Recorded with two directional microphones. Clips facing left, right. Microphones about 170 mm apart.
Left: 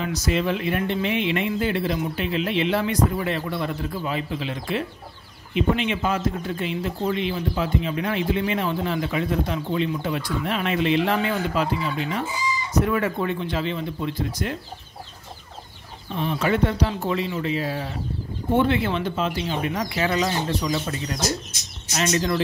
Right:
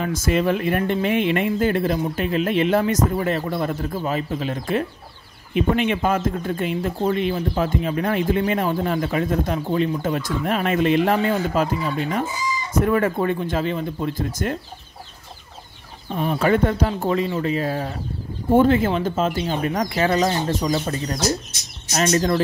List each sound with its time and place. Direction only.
0.0 s speech: 50° right (ahead or behind)
16.1 s speech: 45° right (ahead or behind)